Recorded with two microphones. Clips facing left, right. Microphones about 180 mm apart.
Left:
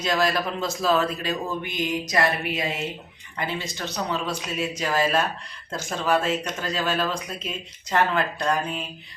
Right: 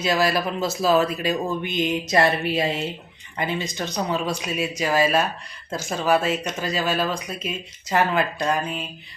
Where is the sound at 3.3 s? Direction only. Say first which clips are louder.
Right 4 dB; 20° right (ahead or behind).